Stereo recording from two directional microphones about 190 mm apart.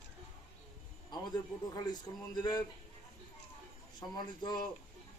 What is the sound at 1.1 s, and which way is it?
Speech, 20° left (ahead or behind).